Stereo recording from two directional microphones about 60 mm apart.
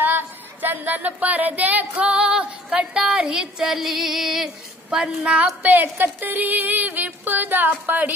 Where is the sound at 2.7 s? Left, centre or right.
Centre.